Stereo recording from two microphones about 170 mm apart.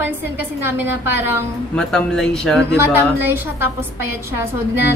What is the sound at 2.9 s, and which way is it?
Speech, 10° right (ahead or behind).